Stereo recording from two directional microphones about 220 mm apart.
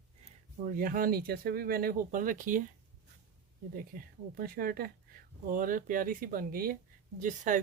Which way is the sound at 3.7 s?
40° right (ahead or behind).